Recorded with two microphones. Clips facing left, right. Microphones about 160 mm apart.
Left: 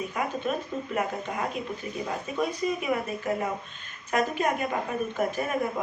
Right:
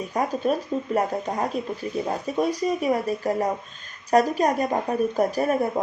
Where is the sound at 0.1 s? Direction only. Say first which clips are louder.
Right 6 dB; 35° right (ahead or behind).